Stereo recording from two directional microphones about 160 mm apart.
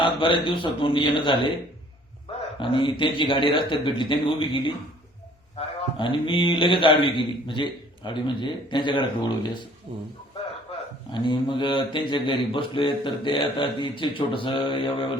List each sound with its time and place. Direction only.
0.0 s a man's voice: 30° left (ahead or behind)
2.6 s a man's voice: 30° left (ahead or behind)
9.9 s speech: 35° right (ahead or behind)
11.1 s a man's voice: 30° left (ahead or behind)